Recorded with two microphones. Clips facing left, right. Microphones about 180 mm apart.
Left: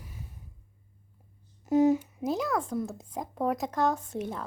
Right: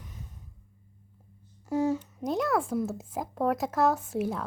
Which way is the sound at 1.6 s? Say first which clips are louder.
Left 5 dB; 20° left (ahead or behind).